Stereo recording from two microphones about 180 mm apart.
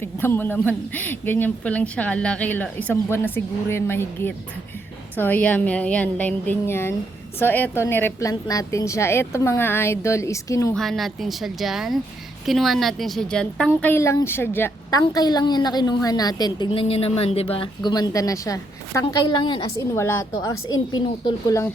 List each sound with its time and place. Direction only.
0.0 s a man's voice: 10° left (ahead or behind)
10.8 s a woman's voice: centre (ahead or behind); by 19.6 s 25° left (ahead or behind)
20.0 s a man's voice: 15° left (ahead or behind)